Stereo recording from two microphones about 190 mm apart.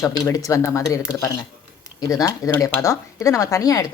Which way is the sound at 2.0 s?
20° left (ahead or behind).